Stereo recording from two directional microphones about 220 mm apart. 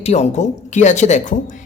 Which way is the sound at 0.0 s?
30° left (ahead or behind).